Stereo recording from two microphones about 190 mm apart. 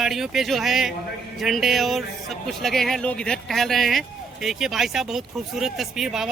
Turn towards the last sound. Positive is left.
turn(degrees=0)  # may be behind; listen again after turning